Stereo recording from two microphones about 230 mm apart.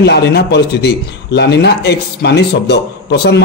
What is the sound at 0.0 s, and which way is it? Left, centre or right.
A man's voice, left.